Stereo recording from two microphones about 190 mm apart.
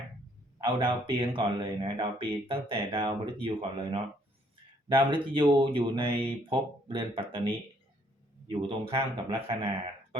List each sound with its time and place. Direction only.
0.6 s a man's voice: 25° right (ahead or behind)